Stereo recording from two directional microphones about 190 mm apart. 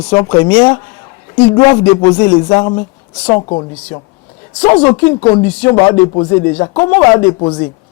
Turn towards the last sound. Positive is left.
turn(degrees=20)  # may be behind; listen again after turning